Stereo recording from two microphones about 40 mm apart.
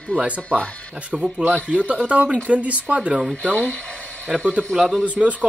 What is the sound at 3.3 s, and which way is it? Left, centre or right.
Speech, left.